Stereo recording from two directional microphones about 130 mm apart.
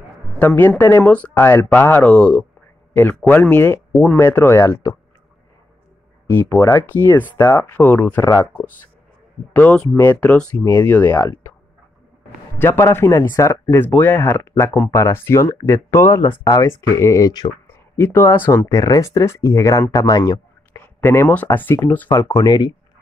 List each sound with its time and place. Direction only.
0.4 s speech: 15° left (ahead or behind)
6.3 s speech: 20° left (ahead or behind)
9.5 s speech: 10° left (ahead or behind)
11.1 s speech: 25° left (ahead or behind)
12.5 s speech: 20° left (ahead or behind)
17.9 s speech: 15° left (ahead or behind)
22.4 s speech: 30° left (ahead or behind)